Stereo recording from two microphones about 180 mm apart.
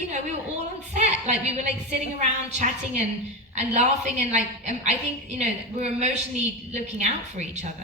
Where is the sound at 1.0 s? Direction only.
40° right (ahead or behind).